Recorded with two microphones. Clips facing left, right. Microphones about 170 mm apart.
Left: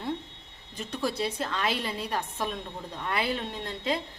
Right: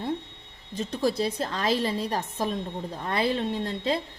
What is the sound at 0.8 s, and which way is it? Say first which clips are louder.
A woman's voice: right 4 dB; 30° right (ahead or behind).